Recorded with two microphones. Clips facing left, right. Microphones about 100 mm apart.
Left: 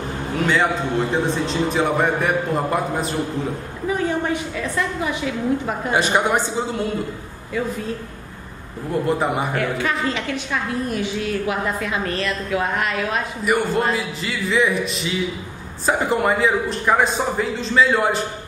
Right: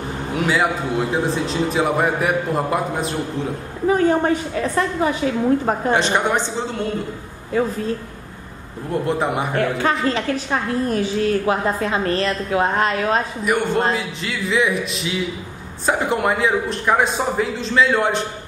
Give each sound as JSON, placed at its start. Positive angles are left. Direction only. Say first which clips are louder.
{"t": 0.4, "sound": "a man's voice", "louder": "even", "side_deg": -5}
{"t": 3.8, "sound": "a woman's voice", "louder": "right 6 dB", "side_deg": -40}
{"t": 5.9, "sound": "a woman's voice", "louder": "left 1 dB", "side_deg": 5}
{"t": 7.5, "sound": "a woman's voice", "louder": "right 4 dB", "side_deg": -35}
{"t": 9.0, "sound": "a man's voice", "louder": "even", "side_deg": 0}
{"t": 9.5, "sound": "a woman's voice", "louder": "right 3 dB", "side_deg": -35}
{"t": 13.4, "sound": "a man's voice", "louder": "right 1 dB", "side_deg": 0}